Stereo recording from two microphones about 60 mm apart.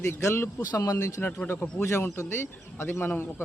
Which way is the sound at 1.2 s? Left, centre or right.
Left.